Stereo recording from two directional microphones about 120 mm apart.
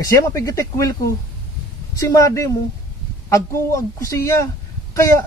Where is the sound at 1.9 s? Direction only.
25° left (ahead or behind).